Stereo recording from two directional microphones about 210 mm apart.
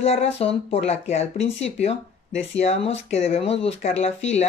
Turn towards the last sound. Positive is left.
turn(degrees=30)  # may be behind; listen again after turning